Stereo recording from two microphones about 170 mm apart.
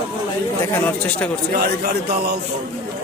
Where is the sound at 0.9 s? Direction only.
10° left (ahead or behind).